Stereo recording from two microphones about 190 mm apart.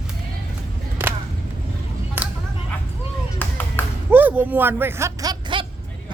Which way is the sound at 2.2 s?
10° right (ahead or behind).